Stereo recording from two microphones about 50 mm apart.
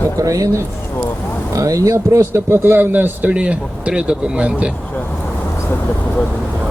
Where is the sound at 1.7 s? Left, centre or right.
Right.